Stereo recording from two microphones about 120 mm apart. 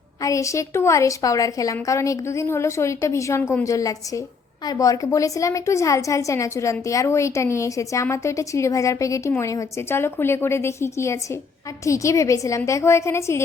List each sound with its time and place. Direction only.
0.2 s a woman's voice: 25° left (ahead or behind)